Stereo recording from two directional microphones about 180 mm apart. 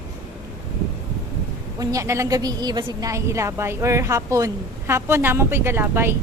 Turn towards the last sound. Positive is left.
turn(degrees=-15)  # may be behind; listen again after turning